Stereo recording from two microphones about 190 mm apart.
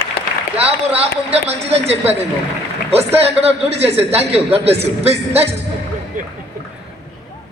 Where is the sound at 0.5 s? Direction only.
30° right (ahead or behind).